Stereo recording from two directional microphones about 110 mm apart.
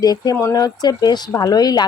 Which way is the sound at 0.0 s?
35° left (ahead or behind).